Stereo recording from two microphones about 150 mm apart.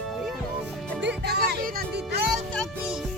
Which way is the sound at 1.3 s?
80° right.